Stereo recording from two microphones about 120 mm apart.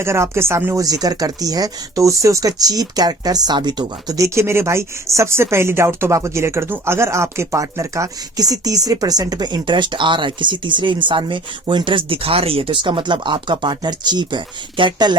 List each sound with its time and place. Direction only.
0.0 s speech: 20° right (ahead or behind); by 15.1 s 40° right (ahead or behind)